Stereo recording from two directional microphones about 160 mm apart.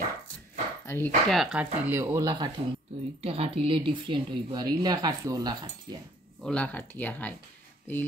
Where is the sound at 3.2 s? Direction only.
35° right (ahead or behind).